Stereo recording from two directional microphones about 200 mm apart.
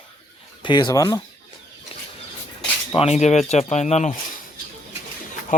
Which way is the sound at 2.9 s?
30° left (ahead or behind).